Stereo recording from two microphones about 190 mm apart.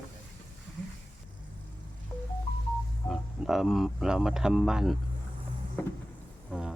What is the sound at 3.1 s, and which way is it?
Speech, centre (ahead or behind).